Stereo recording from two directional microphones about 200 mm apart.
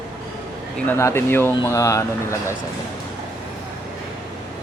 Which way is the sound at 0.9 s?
15° left (ahead or behind).